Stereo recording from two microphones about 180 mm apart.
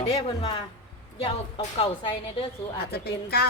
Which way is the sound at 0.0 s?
35° left (ahead or behind).